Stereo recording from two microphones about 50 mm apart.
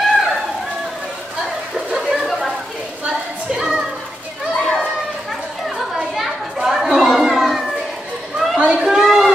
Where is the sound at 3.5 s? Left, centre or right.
Centre.